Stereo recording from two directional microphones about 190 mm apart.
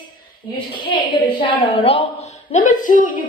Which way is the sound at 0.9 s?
25° left (ahead or behind).